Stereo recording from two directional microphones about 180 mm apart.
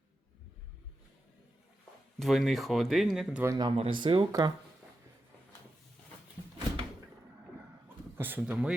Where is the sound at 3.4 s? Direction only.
20° right (ahead or behind).